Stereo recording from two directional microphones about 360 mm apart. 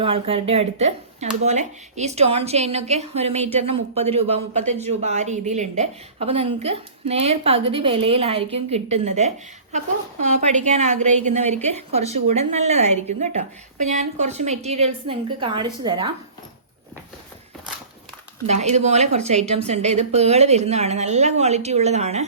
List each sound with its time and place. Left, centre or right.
0.0 s a woman's voice: centre
18.4 s a woman's voice: centre